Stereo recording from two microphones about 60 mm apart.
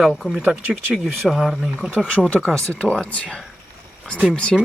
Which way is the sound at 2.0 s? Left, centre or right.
Centre.